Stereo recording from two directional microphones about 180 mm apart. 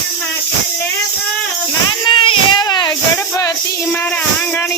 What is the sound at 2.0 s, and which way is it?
Music, 30° left (ahead or behind).